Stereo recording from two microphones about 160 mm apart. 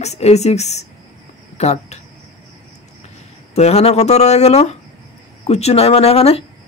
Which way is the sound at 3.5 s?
40° left (ahead or behind).